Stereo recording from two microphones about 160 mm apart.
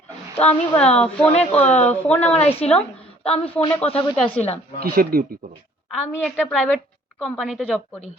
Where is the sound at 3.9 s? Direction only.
35° left (ahead or behind).